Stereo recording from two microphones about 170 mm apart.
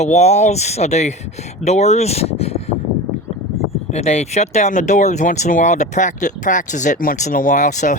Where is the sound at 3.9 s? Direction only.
40° left (ahead or behind).